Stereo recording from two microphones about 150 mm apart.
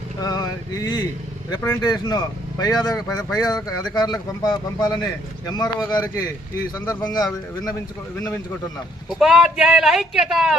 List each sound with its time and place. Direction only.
0.2 s speech: 25° left (ahead or behind)
1.6 s a man's voice: 15° left (ahead or behind)
1.9 s speech: 25° left (ahead or behind)
9.0 s speech: 5° right (ahead or behind)